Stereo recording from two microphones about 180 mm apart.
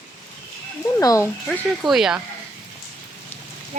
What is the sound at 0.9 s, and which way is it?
Speech, 15° left (ahead or behind).